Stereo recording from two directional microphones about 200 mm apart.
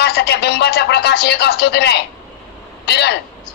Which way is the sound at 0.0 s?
55° left (ahead or behind).